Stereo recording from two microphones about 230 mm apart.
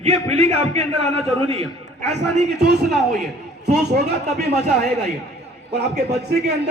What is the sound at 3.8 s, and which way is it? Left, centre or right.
Speech, right.